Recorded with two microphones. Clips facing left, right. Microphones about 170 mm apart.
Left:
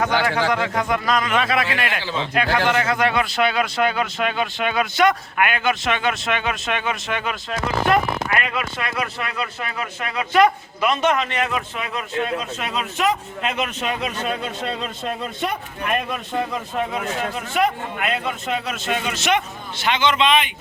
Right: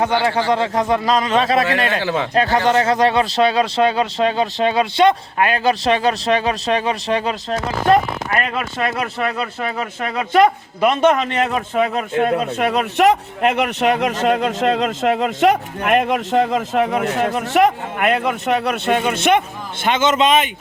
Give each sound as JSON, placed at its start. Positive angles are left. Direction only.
{"t": 0.0, "sound": "speech", "side_deg": -30}
{"t": 2.0, "sound": "speech", "side_deg": -60}
{"t": 2.6, "sound": "speech", "side_deg": -35}